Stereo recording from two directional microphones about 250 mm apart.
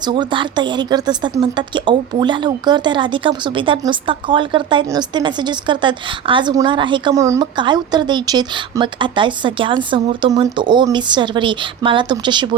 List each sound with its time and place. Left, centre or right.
0.0 s a woman's voice: centre